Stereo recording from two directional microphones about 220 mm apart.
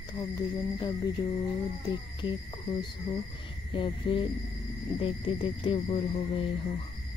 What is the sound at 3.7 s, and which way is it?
Music, 25° left (ahead or behind).